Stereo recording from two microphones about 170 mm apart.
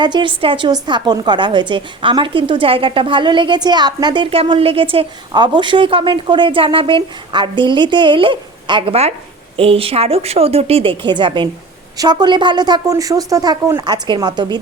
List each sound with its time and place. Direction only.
0.0 s a woman's voice: 30° right (ahead or behind)